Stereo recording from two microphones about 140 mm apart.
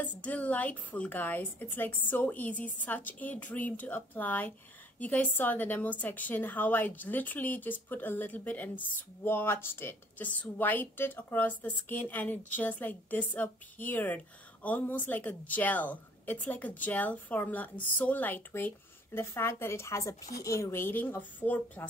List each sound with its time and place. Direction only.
0.0 s a woman's voice: 10° left (ahead or behind)